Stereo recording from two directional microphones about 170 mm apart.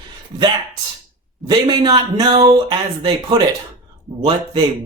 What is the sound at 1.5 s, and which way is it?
Speech, 25° right (ahead or behind).